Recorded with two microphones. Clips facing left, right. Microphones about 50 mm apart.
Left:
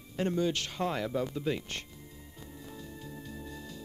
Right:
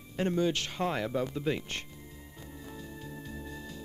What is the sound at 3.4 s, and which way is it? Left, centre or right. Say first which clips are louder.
Music: right 1 dB; right.